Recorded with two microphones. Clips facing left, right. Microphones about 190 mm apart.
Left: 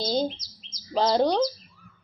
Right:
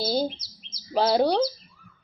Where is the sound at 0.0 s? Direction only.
10° right (ahead or behind).